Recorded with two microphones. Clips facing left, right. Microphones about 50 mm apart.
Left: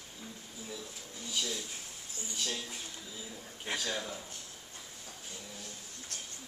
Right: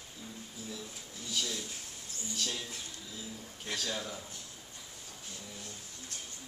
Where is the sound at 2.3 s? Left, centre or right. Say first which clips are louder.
Even; centre.